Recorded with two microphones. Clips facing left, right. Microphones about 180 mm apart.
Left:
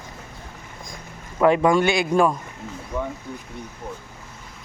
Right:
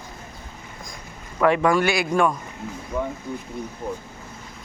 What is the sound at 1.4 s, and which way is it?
Speech, 25° left (ahead or behind).